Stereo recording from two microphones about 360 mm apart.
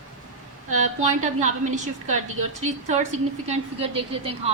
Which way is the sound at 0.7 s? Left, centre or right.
Centre.